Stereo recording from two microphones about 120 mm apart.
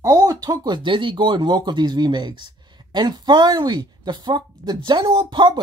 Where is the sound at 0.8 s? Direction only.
40° right (ahead or behind).